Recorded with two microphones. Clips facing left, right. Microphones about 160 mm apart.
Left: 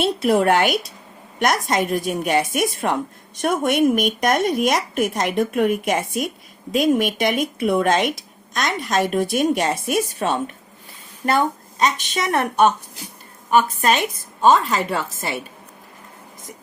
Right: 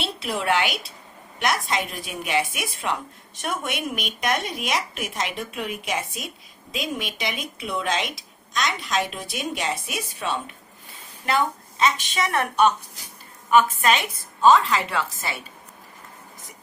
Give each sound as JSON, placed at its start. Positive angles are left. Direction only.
{"t": 0.0, "sound": "speech", "side_deg": 50}